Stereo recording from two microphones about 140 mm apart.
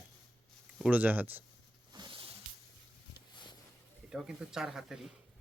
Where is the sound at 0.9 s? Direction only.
10° right (ahead or behind).